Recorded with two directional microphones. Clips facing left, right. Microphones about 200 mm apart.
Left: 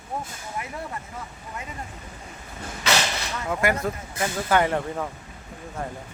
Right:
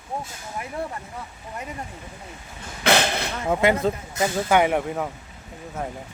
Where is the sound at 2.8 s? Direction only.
55° right (ahead or behind).